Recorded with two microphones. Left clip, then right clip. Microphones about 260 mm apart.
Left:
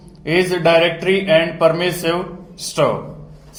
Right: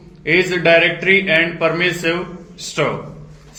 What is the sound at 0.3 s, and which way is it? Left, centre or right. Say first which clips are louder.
A man's voice: right 1 dB; left.